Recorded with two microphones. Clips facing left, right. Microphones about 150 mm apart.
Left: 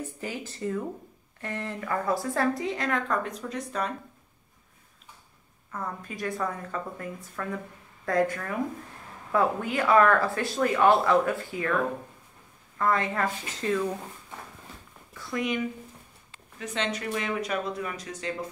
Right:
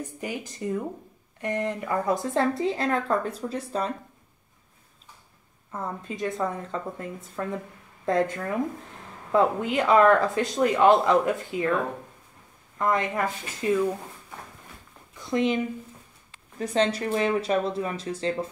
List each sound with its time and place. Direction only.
0.0 s speech: 15° right (ahead or behind); by 3.9 s 30° right (ahead or behind)
5.7 s speech: 25° right (ahead or behind)
12.7 s speech: 20° right (ahead or behind)
15.1 s speech: 25° right (ahead or behind)